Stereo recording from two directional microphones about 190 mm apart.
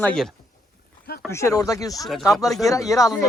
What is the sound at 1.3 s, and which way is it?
Speech, 15° left (ahead or behind).